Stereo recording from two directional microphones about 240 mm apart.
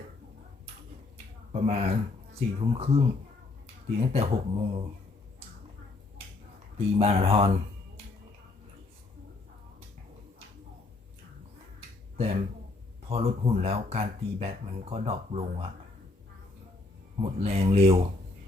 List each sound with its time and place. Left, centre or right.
1.5 s speech: right
4.1 s speech: right
7.0 s speech: right
12.1 s speech: right
17.2 s speech: right